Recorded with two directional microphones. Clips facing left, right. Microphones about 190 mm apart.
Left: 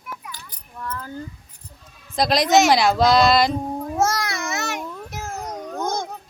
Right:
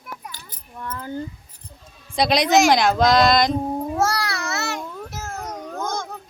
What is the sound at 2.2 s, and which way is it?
A woman's voice, centre (ahead or behind).